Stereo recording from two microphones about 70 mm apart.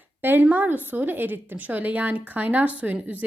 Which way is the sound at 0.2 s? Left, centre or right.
Right.